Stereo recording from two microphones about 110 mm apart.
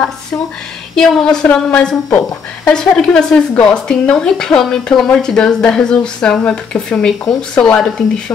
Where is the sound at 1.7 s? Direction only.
15° left (ahead or behind).